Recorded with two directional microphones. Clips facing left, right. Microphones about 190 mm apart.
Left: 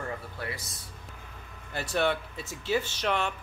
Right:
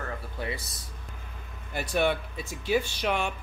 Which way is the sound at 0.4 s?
20° right (ahead or behind).